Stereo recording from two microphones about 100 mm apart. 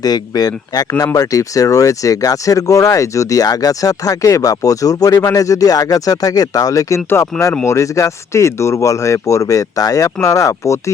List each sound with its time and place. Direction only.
0.0 s speech: 40° left (ahead or behind)